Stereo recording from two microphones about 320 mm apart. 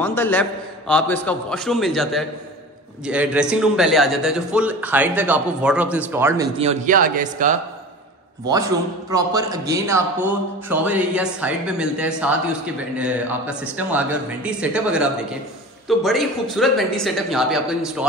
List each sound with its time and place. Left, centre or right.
0.0 s a man's voice: centre; by 7.5 s right
9.1 s a man's voice: centre